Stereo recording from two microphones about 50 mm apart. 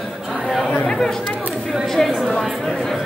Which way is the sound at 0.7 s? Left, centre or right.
Left.